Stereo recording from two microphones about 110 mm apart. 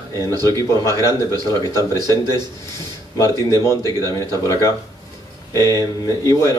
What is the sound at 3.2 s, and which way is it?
Speech, 25° left (ahead or behind).